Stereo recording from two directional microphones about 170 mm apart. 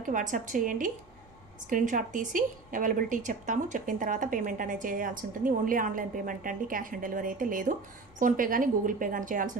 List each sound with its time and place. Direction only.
0.0 s a woman's voice: 50° right (ahead or behind)